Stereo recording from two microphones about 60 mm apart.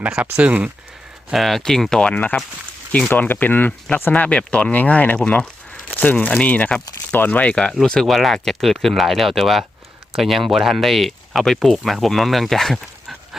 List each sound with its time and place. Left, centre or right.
0.0 s speech: centre
1.3 s speech: centre
3.1 s speech: left; by 13.1 s centre